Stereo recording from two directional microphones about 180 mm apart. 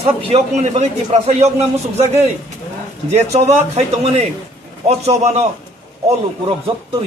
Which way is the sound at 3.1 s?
35° right (ahead or behind).